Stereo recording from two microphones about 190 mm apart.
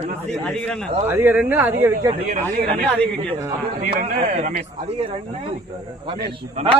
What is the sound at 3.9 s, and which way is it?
Speech, 40° right (ahead or behind).